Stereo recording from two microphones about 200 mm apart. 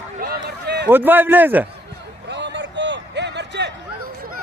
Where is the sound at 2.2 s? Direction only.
60° right (ahead or behind).